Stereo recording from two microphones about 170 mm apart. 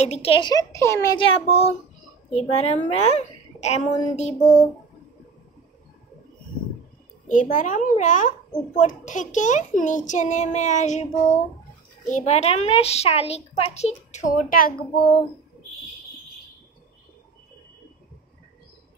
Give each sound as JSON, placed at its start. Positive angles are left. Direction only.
{"t": 0.0, "sound": "a child's voice", "side_deg": 40}
{"t": 1.1, "sound": "a child's voice", "side_deg": 30}
{"t": 7.2, "sound": "speech", "side_deg": 50}
{"t": 12.1, "sound": "a child's voice", "side_deg": 45}